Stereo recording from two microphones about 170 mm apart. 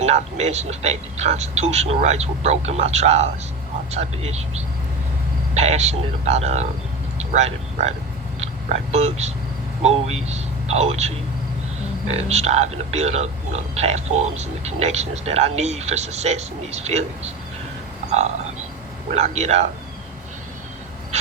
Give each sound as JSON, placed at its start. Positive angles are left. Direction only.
{"t": 0.0, "sound": "speech", "side_deg": -40}
{"t": 12.1, "sound": "speech", "side_deg": -40}
{"t": 19.1, "sound": "speech", "side_deg": -40}